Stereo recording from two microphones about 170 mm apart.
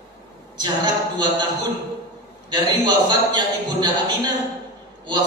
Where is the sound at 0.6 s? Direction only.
25° right (ahead or behind).